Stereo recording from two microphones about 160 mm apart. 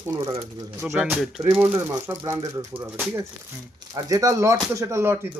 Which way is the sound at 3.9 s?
20° right (ahead or behind).